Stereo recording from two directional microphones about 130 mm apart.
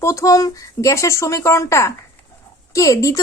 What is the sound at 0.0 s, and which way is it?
A woman's voice, 25° left (ahead or behind).